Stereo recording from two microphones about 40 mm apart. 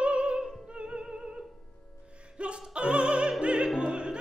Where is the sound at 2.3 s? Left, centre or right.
Right.